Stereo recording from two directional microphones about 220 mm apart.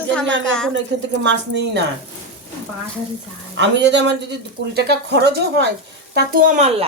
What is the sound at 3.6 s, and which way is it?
A woman's voice, 55° right (ahead or behind).